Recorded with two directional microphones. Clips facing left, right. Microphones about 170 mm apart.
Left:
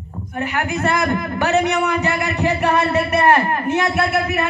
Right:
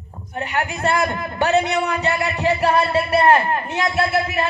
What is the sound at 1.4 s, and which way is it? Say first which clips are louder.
A man's voice: even; 30° right (ahead or behind).